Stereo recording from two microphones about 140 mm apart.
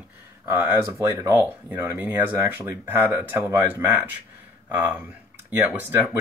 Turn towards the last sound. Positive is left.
turn(degrees=-10)  # may be behind; listen again after turning